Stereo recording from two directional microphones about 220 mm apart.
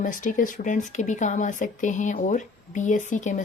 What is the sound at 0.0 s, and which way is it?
Speech, 35° left (ahead or behind).